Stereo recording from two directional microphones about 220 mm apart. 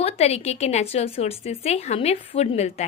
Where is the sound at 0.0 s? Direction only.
30° left (ahead or behind).